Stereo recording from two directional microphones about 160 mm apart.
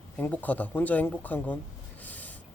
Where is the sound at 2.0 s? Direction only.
10° left (ahead or behind).